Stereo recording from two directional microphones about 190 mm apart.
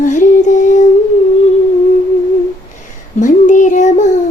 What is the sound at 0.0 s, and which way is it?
Child singing, 40° left (ahead or behind).